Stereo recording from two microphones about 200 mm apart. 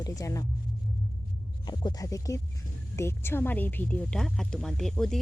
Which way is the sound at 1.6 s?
20° left (ahead or behind).